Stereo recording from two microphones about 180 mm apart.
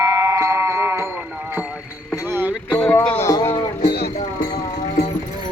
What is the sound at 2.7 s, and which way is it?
Music, 5° left (ahead or behind).